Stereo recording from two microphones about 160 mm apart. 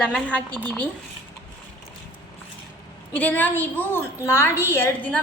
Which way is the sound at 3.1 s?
10° left (ahead or behind).